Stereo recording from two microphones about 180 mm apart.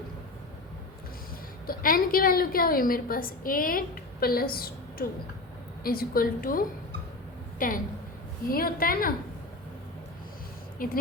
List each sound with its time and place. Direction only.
1.6 s a woman's voice: 50° left (ahead or behind)
10.8 s a woman's voice: 50° left (ahead or behind)